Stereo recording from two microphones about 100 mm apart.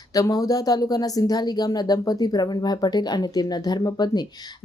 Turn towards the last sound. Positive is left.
turn(degrees=45)  # may be behind; listen again after turning